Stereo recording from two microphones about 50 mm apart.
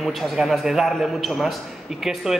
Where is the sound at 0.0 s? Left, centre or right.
Centre.